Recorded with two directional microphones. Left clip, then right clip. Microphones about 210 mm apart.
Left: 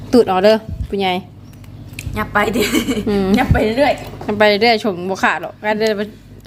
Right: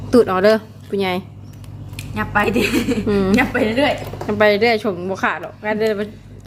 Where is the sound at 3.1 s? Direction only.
5° left (ahead or behind).